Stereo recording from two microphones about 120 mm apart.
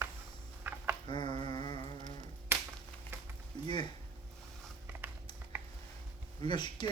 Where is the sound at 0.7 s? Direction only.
15° right (ahead or behind).